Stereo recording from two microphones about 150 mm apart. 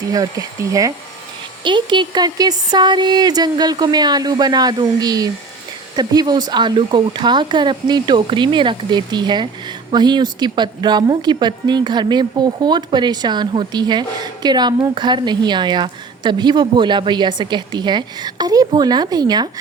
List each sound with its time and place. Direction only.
0.1 s speech: 25° right (ahead or behind)